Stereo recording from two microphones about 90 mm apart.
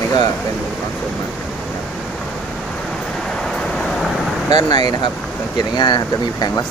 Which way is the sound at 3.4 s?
5° left (ahead or behind).